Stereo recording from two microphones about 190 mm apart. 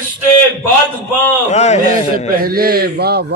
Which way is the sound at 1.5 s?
35° left (ahead or behind).